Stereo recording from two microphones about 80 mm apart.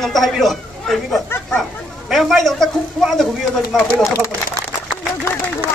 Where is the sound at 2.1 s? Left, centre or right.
Centre.